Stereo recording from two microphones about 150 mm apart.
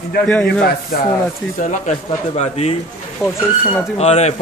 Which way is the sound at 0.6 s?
90° left.